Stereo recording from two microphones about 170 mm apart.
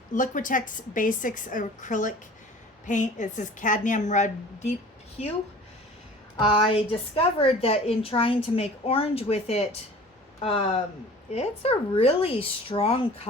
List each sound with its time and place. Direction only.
0.1 s a woman's voice: 50° left (ahead or behind)
6.3 s a woman's voice: 30° left (ahead or behind)
11.3 s a woman's voice: 35° left (ahead or behind)